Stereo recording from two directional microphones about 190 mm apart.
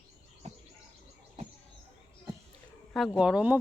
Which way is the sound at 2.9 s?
Centre (ahead or behind).